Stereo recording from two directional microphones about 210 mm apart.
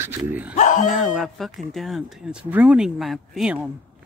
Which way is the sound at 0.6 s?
35° left (ahead or behind).